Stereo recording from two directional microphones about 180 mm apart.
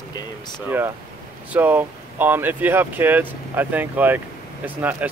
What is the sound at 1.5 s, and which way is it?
Speech, 10° right (ahead or behind).